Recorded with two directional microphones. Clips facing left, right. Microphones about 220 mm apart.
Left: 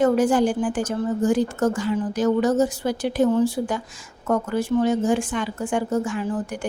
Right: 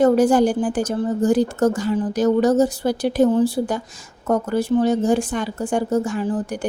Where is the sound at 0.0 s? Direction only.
40° right (ahead or behind).